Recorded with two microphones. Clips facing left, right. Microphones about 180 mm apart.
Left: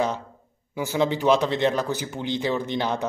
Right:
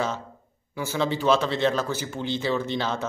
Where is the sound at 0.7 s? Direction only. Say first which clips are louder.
Left 3 dB; 15° left (ahead or behind).